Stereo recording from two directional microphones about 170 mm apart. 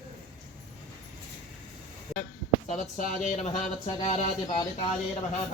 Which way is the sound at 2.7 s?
45° left (ahead or behind).